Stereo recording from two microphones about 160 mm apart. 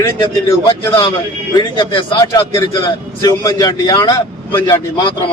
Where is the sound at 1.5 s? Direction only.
25° left (ahead or behind).